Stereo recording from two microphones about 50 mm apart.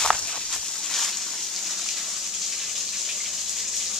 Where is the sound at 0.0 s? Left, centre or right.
Centre.